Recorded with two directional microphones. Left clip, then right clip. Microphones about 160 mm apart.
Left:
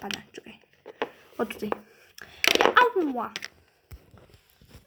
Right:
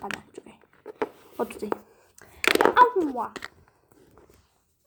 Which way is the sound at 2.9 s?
5° left (ahead or behind).